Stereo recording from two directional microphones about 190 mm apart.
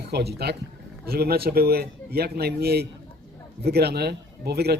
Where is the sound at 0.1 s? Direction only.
60° right (ahead or behind).